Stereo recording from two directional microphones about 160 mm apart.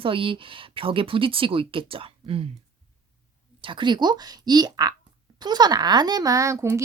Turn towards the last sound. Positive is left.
turn(degrees=-20)  # may be behind; listen again after turning